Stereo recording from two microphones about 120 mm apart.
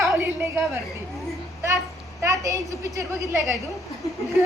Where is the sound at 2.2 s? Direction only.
25° right (ahead or behind).